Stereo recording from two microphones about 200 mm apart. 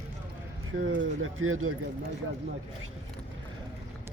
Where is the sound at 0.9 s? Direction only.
90° right.